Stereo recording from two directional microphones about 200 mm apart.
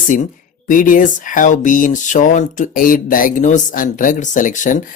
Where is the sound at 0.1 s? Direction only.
40° left (ahead or behind).